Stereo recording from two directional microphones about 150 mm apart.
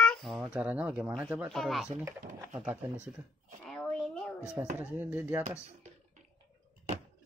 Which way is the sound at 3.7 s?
Centre (ahead or behind).